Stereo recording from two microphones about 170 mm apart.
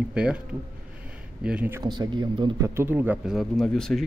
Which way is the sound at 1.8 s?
25° right (ahead or behind).